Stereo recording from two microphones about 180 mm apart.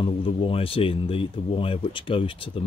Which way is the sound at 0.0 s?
30° left (ahead or behind).